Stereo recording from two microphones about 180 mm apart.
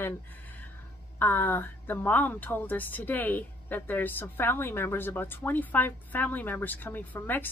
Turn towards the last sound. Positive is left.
turn(degrees=10)  # may be behind; listen again after turning